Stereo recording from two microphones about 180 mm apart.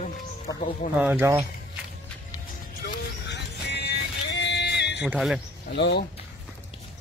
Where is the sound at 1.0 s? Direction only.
10° right (ahead or behind).